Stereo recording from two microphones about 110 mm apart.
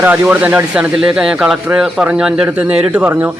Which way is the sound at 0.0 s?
15° right (ahead or behind).